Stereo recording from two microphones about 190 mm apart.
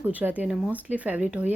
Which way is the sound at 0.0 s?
10° right (ahead or behind).